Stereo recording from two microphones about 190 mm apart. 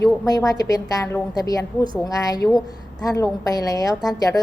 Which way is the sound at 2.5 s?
Centre (ahead or behind).